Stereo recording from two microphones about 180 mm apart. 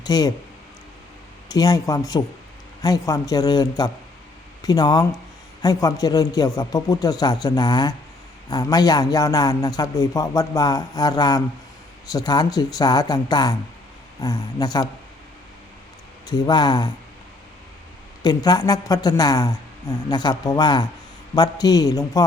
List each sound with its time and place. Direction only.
0.0 s speech: 20° left (ahead or behind)
1.5 s a man's voice: 20° left (ahead or behind)
16.2 s a man's voice: 25° left (ahead or behind)
18.2 s a man's voice: 20° left (ahead or behind)